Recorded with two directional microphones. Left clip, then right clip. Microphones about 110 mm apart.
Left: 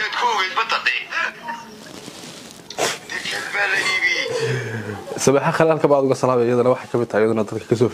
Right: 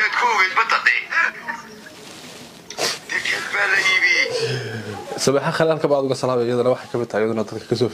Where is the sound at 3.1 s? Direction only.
15° right (ahead or behind).